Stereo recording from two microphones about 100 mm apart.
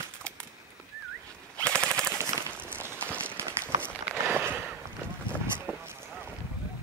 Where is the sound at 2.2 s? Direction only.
25° right (ahead or behind).